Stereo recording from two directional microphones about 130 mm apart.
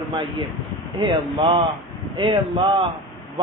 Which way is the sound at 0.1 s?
40° right (ahead or behind).